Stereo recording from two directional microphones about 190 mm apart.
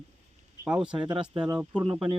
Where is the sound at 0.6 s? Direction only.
5° right (ahead or behind).